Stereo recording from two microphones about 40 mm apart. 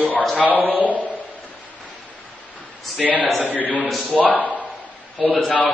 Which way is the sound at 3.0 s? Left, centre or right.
Right.